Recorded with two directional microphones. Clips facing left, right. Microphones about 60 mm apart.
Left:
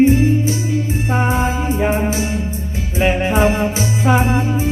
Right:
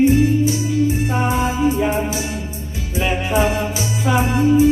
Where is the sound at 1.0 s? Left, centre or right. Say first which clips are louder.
Left 1 dB; left.